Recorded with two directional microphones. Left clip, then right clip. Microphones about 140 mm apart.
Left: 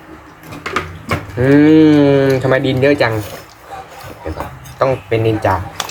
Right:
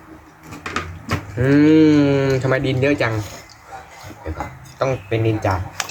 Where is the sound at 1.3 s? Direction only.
10° right (ahead or behind).